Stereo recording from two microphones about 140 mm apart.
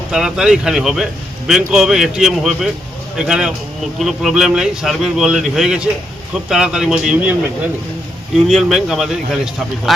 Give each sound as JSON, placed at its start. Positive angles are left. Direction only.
{"t": 0.1, "sound": "speech", "side_deg": -5}
{"t": 8.4, "sound": "speech", "side_deg": 0}